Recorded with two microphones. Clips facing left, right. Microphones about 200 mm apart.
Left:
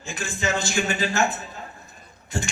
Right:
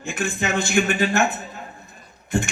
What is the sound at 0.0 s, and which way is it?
A man's voice, 60° right (ahead or behind).